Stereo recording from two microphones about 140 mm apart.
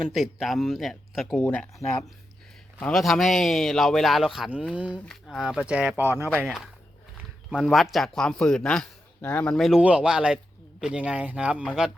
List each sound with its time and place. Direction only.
0.1 s a man's voice: centre (ahead or behind)
1.5 s a man's voice: 10° left (ahead or behind); by 4.9 s 10° right (ahead or behind)
4.9 s a man's voice: 5° left (ahead or behind); by 6.2 s 15° right (ahead or behind)
6.2 s a man's voice: 5° left (ahead or behind)